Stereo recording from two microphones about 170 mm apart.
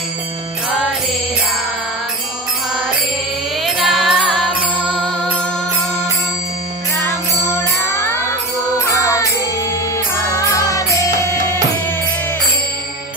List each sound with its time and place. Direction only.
0.7 s mantra: centre (ahead or behind)
3.6 s music: centre (ahead or behind)
7.9 s music: 15° left (ahead or behind)
10.1 s music: 20° left (ahead or behind)